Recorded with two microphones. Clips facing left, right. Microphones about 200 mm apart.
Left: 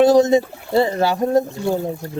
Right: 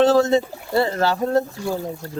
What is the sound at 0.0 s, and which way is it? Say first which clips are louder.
Speech: left 3 dB; 15° left (ahead or behind).